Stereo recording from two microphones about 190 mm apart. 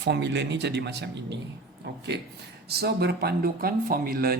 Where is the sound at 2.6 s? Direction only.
60° right (ahead or behind).